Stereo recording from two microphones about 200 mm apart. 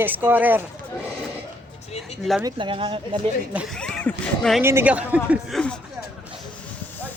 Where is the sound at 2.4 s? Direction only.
25° right (ahead or behind).